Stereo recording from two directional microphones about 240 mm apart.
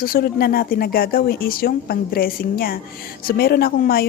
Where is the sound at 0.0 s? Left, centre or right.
Left.